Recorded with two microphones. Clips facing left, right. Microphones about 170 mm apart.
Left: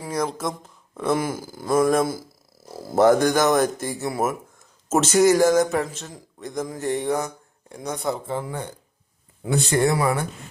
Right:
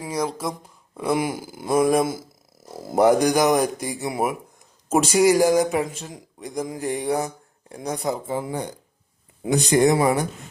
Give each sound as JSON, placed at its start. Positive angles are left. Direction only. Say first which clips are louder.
{"t": 0.0, "sound": "a man's voice", "louder": "even", "side_deg": 0}